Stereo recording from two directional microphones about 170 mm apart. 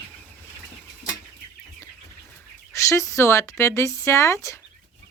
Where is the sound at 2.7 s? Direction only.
20° left (ahead or behind).